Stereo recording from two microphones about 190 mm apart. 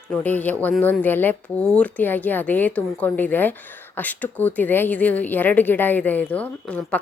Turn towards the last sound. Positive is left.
turn(degrees=5)  # may be behind; listen again after turning